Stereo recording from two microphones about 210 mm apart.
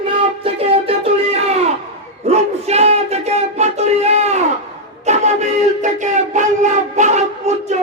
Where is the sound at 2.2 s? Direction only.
30° right (ahead or behind).